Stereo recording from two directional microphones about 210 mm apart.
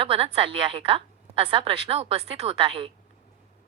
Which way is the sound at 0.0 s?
25° right (ahead or behind).